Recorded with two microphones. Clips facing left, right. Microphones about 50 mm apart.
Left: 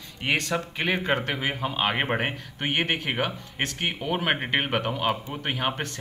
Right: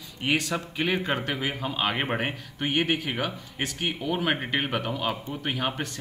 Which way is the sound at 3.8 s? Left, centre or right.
Left.